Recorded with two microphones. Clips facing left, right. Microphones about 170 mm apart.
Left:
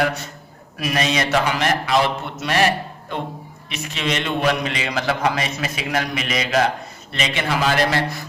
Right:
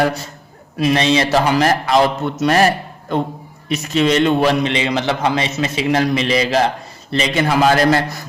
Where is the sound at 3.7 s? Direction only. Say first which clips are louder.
Right 9 dB; 40° right (ahead or behind).